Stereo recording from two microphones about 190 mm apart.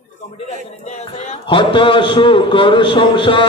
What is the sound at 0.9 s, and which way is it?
Mantra, 35° left (ahead or behind).